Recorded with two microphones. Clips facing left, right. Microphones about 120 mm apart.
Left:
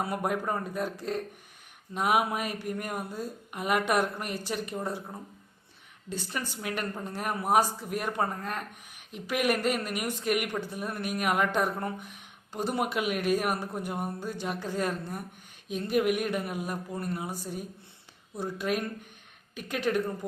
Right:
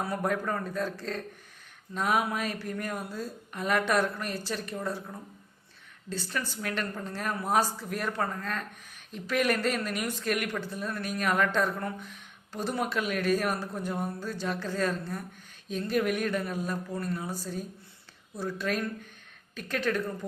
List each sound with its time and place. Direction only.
0.1 s speech: 15° left (ahead or behind)